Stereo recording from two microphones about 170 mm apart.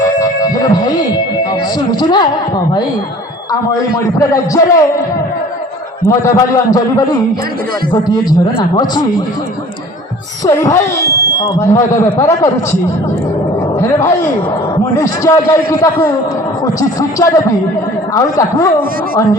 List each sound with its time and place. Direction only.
0.0 s music: 20° left (ahead or behind)
1.9 s a man's voice: 25° left (ahead or behind)
3.5 s a man's voice: 20° left (ahead or behind)
6.0 s a man's voice: 15° left (ahead or behind)
10.4 s speech: 20° left (ahead or behind)
13.7 s a man's voice: 15° left (ahead or behind)